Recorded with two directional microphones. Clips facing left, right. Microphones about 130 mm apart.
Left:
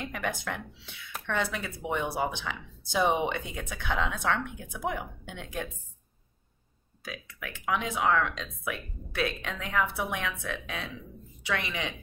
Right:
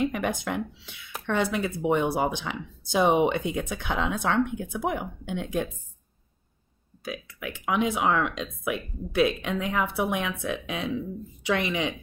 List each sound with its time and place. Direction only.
0.0 s speech: 20° right (ahead or behind)
7.0 s speech: 15° right (ahead or behind)